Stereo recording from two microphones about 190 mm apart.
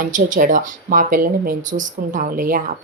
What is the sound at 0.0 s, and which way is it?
Speech, 45° right (ahead or behind).